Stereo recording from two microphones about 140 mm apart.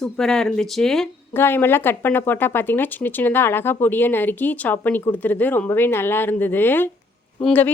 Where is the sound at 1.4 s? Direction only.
15° left (ahead or behind).